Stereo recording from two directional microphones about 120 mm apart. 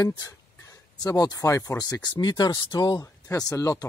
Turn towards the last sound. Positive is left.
turn(degrees=25)  # may be behind; listen again after turning